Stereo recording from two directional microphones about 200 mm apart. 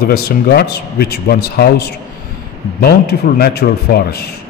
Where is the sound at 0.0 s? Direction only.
50° left (ahead or behind).